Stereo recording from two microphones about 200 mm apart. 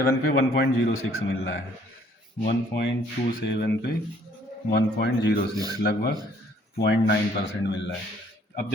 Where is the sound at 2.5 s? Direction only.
55° left (ahead or behind).